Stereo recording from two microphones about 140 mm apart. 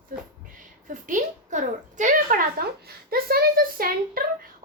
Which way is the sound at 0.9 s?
70° right (ahead or behind).